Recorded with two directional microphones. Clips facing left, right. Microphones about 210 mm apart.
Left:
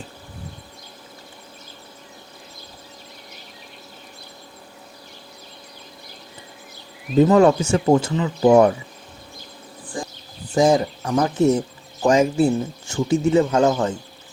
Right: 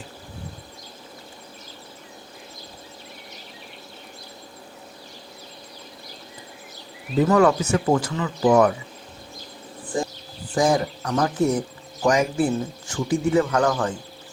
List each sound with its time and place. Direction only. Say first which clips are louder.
7.2 s speech: left 4 dB; 25° left (ahead or behind)
9.9 s insect: right 5 dB; 25° right (ahead or behind)
10.5 s speech: left 4 dB; 25° left (ahead or behind)